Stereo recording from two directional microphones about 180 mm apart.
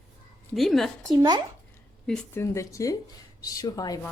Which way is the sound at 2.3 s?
15° left (ahead or behind).